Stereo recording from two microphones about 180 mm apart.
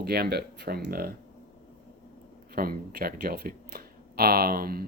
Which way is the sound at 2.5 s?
55° right (ahead or behind).